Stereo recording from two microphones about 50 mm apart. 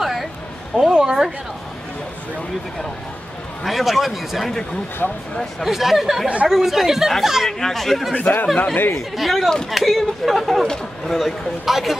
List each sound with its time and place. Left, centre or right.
0.0 s a sound: centre
0.7 s a woman's voice: centre
3.6 s a man's voice: centre
5.0 s speech: centre
5.6 s a man's voice: centre
6.2 s speech: right
6.5 s a man's voice: centre
7.4 s a man's voice: centre
8.2 s speech: left
9.1 s a man's voice: centre